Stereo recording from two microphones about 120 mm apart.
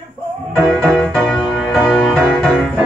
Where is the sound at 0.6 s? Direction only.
5° left (ahead or behind).